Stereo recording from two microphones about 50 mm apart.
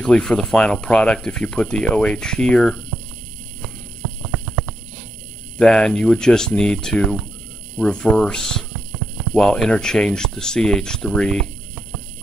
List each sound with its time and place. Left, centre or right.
0.0 s speech: centre
4.3 s horse: right
5.6 s speech: centre